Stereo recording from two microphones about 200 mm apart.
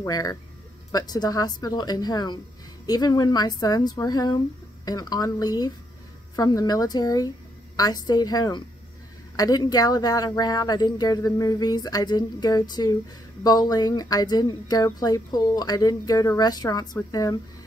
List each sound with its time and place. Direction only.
0.0 s speech: 20° left (ahead or behind)